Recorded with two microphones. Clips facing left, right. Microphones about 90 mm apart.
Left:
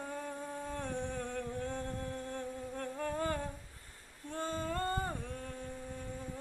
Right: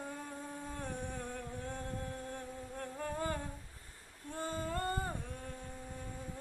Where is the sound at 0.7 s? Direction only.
15° right (ahead or behind).